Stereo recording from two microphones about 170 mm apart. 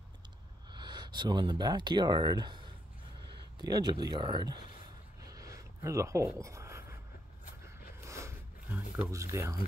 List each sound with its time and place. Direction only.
0.7 s speech: 25° right (ahead or behind)
5.2 s a sound: 20° right (ahead or behind)
8.7 s speech: 10° right (ahead or behind)